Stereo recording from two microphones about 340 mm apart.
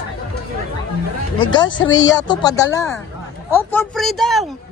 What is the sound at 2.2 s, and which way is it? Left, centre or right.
Speech, centre.